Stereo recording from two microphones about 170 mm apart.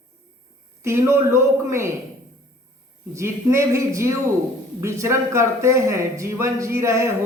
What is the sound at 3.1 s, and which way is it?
Speech, 15° right (ahead or behind).